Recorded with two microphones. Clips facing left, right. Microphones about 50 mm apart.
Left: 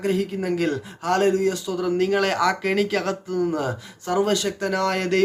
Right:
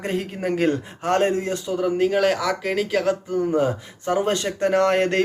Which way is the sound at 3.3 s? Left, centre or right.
Right.